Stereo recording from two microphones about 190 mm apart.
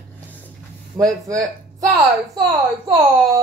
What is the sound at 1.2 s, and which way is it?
A woman's voice, 20° right (ahead or behind).